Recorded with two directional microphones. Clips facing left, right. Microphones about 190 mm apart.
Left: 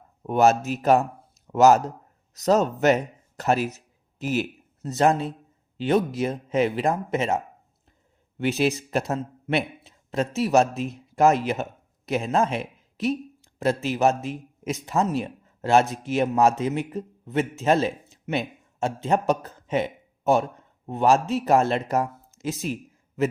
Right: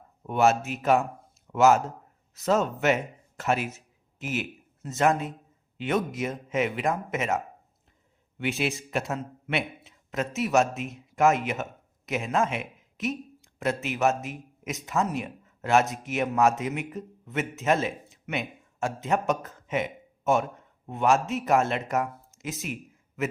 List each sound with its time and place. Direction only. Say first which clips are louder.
0.2 s a man's voice: left 3 dB; 40° left (ahead or behind)